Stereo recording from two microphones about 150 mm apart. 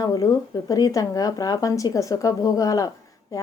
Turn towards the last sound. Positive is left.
turn(degrees=20)  # may be behind; listen again after turning